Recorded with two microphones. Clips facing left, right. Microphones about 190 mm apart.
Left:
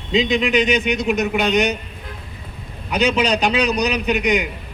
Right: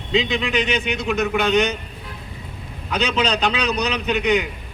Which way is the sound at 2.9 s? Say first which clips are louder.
Left 3 dB; 15° left (ahead or behind).